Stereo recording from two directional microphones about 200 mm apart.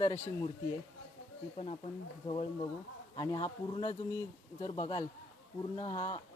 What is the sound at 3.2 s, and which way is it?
Speech, 20° left (ahead or behind).